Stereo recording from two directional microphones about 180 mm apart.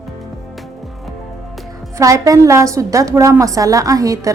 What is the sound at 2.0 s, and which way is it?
A woman's voice, 20° right (ahead or behind).